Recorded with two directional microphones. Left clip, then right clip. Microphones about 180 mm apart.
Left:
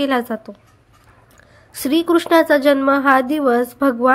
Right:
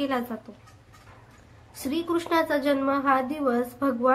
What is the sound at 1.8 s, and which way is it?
A woman's voice, 45° left (ahead or behind).